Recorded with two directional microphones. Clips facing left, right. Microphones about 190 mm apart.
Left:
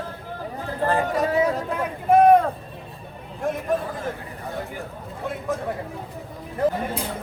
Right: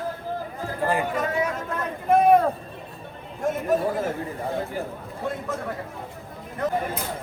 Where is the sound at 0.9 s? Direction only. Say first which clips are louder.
Left 4 dB; 35° left (ahead or behind).